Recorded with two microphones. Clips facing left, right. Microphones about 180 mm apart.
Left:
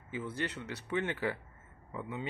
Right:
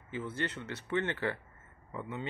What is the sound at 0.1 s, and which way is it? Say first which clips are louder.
Speech: right 1 dB; 10° left (ahead or behind).